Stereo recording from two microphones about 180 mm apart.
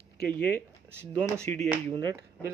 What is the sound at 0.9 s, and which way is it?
Speech, 15° right (ahead or behind).